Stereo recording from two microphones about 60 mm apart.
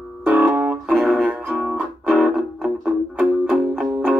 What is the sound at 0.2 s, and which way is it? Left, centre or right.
Music, right.